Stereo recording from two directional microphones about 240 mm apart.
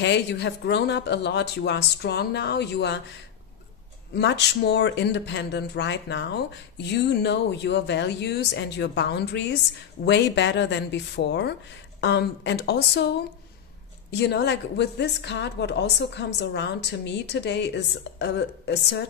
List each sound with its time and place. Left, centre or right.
0.0 s speech: left
4.1 s speech: left
14.1 s speech: left